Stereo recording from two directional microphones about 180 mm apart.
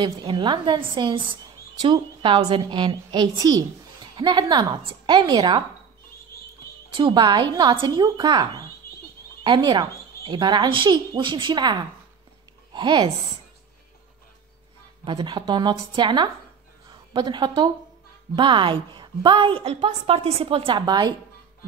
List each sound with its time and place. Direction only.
0.0 s a woman's voice: 25° right (ahead or behind)
6.9 s a woman's voice: 25° right (ahead or behind)
15.0 s a woman's voice: 25° right (ahead or behind)